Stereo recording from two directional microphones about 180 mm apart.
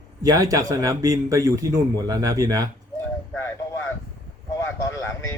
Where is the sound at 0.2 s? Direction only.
20° right (ahead or behind).